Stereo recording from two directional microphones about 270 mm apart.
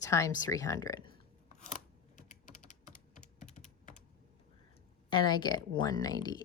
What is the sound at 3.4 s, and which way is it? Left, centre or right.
Computer keyboard, left.